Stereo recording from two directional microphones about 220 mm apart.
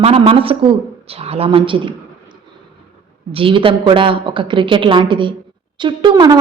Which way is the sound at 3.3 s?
25° right (ahead or behind).